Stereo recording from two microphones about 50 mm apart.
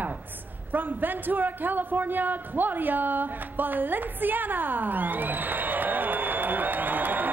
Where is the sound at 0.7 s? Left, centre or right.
Right.